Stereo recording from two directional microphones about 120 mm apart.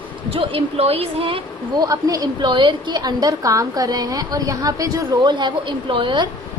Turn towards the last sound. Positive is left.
turn(degrees=-45)  # may be behind; listen again after turning